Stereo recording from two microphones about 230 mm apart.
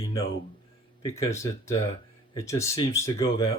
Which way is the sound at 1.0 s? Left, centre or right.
Centre.